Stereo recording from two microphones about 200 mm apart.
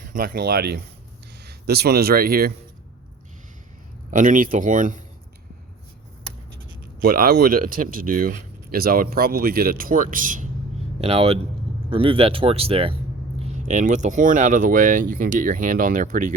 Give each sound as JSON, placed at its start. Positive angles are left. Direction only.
{"t": 0.0, "sound": "speech", "side_deg": -40}
{"t": 4.1, "sound": "speech", "side_deg": -40}
{"t": 7.0, "sound": "speech", "side_deg": -45}
{"t": 11.0, "sound": "speech", "side_deg": -30}